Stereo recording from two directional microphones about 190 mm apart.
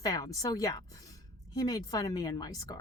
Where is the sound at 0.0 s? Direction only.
20° left (ahead or behind).